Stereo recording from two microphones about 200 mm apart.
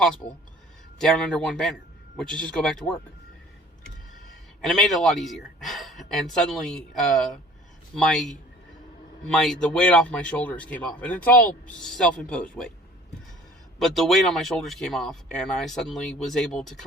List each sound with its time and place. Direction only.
0.9 s speech: 5° left (ahead or behind)
4.6 s speech: centre (ahead or behind)
13.7 s speech: centre (ahead or behind)